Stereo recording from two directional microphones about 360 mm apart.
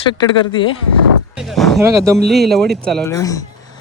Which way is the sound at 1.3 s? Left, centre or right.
Centre.